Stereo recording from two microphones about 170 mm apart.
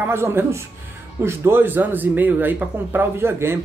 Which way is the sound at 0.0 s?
15° right (ahead or behind).